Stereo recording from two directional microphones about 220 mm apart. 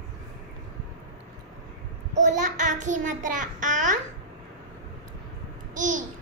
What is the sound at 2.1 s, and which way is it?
A child's voice, 35° right (ahead or behind).